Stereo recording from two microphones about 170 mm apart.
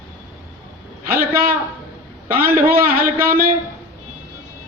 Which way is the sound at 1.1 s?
60° right (ahead or behind).